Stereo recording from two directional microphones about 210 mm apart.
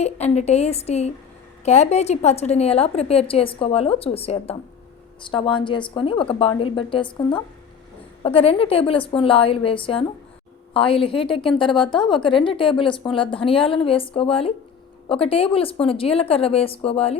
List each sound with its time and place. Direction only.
0.0 s a woman's voice: 30° left (ahead or behind)